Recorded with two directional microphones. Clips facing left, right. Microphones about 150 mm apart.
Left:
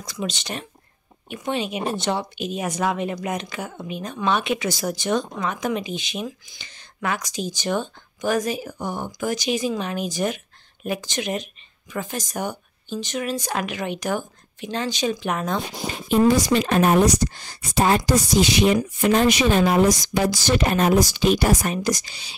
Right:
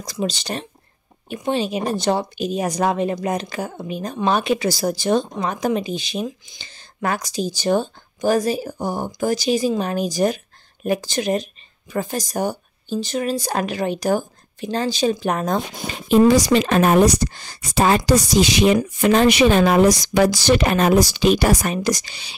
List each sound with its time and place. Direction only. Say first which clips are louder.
0.0 s speech: right 5 dB; 35° right (ahead or behind)
6.2 s speech: right 3 dB; 20° right (ahead or behind)
6.7 s speech: right 3 dB; 35° right (ahead or behind)
16.1 s speech: right 4 dB; 90° right; by 22.3 s 70° right (ahead or behind)